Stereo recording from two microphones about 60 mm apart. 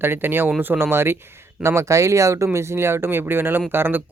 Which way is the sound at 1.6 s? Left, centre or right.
Right.